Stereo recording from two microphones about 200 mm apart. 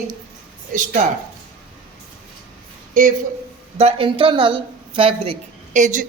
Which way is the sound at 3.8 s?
25° right (ahead or behind).